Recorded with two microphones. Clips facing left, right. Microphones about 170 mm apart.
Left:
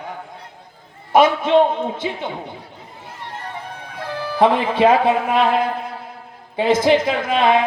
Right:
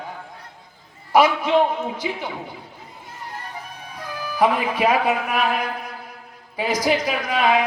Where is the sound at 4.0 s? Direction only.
30° left (ahead or behind).